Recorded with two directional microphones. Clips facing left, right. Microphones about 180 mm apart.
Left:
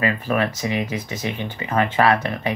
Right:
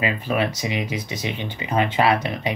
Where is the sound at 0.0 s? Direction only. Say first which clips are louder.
Left 1 dB; 15° right (ahead or behind).